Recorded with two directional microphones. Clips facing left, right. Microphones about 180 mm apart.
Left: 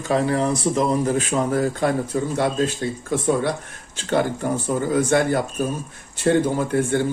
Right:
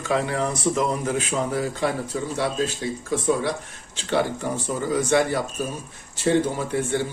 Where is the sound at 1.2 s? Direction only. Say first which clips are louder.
Left 4 dB; 45° left (ahead or behind).